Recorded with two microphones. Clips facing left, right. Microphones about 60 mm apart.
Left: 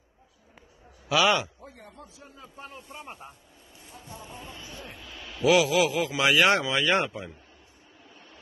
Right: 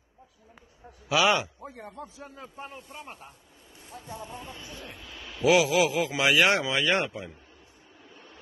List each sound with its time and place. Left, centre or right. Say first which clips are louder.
1.0 s a sound: even; centre
1.8 s a man's voice: right 6 dB; right
2.3 s speech: right 3 dB; right
2.9 s speech: left 1 dB; centre
5.4 s a man's voice: even; centre
6.2 s speech: left 1 dB; centre